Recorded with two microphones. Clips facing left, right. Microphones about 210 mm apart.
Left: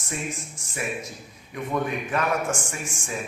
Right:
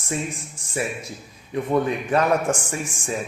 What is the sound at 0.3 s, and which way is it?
Speech, 30° right (ahead or behind).